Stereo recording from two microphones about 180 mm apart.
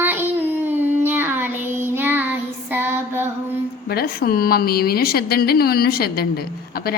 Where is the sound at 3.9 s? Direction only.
60° left (ahead or behind).